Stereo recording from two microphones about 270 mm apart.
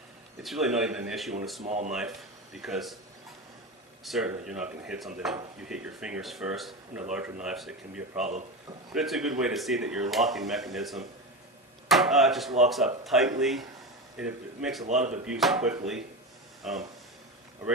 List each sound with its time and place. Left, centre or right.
0.4 s speech: centre
1.6 s speech: right
1.9 s speech: centre
4.0 s speech: centre
16.6 s speech: centre